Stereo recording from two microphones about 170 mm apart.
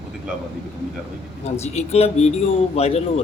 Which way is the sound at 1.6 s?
40° left (ahead or behind).